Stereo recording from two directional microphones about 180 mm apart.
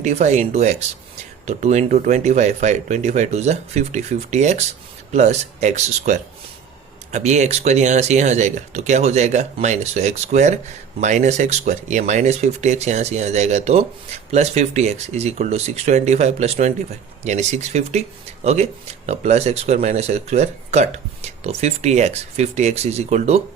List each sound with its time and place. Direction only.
0.0 s speech: 40° right (ahead or behind)